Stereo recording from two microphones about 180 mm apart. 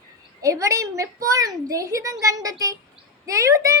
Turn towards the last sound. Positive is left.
turn(degrees=-20)  # may be behind; listen again after turning